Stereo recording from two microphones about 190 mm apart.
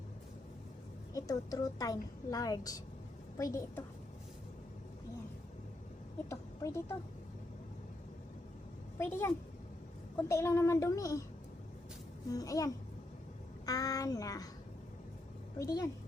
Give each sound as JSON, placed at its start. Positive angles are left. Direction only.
{"t": 1.1, "sound": "a woman's voice", "side_deg": 20}
{"t": 6.2, "sound": "a sound", "side_deg": 15}
{"t": 9.0, "sound": "speech", "side_deg": 10}
{"t": 12.3, "sound": "a woman's voice", "side_deg": 20}
{"t": 15.5, "sound": "speech", "side_deg": 20}